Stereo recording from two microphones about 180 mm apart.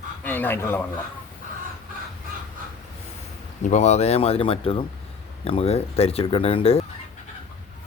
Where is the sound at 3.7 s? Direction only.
40° left (ahead or behind).